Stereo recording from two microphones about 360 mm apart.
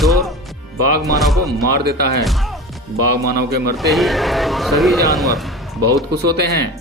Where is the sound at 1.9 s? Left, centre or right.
Right.